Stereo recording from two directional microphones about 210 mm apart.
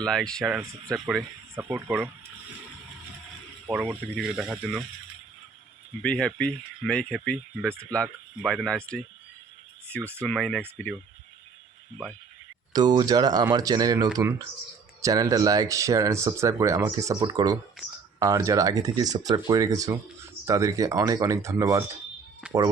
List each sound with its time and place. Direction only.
0.0 s speech: 5° left (ahead or behind)
3.7 s speech: 5° right (ahead or behind)
6.0 s speech: 5° left (ahead or behind)
10.2 s speech: 5° left (ahead or behind)
12.7 s speech: 20° right (ahead or behind)